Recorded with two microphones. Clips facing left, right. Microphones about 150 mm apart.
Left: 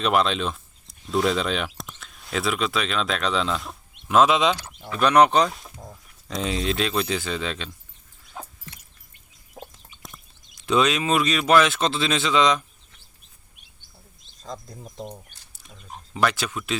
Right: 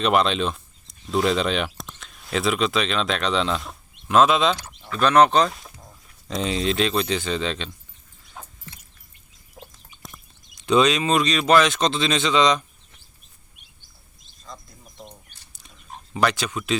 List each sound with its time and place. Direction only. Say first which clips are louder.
0.0 s speech: right 2 dB; centre (ahead or behind)
4.2 s speech: right 1 dB; 10° left (ahead or behind)
6.2 s a man's voice: right 2 dB; centre (ahead or behind)
10.7 s a man's voice: right 2 dB; centre (ahead or behind)
14.5 s speech: left 7 dB; 40° left (ahead or behind)
15.5 s pig: left 1 dB; 5° left (ahead or behind)
16.2 s a man's voice: right 1 dB; centre (ahead or behind)